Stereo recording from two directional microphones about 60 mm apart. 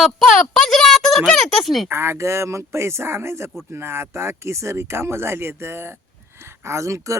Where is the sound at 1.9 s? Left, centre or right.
Right.